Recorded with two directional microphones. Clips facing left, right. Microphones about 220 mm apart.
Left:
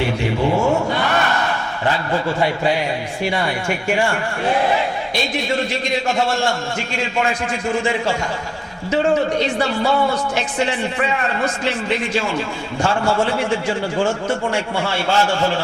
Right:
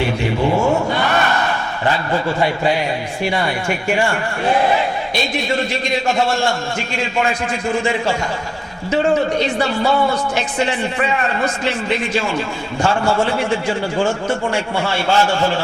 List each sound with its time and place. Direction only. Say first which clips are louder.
0.5 s speech: right 1 dB; 30° right (ahead or behind)
0.9 s a man's voice: right 1 dB; 15° right (ahead or behind)